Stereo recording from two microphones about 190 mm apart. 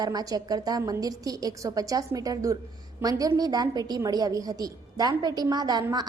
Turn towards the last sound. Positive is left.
turn(degrees=-20)  # may be behind; listen again after turning